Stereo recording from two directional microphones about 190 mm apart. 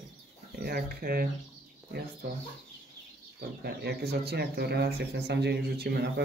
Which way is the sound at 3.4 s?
55° right (ahead or behind).